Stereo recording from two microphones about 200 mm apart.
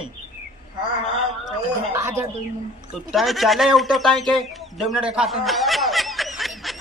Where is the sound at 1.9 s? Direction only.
15° right (ahead or behind).